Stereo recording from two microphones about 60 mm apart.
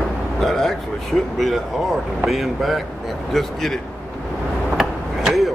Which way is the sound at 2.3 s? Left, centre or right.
Centre.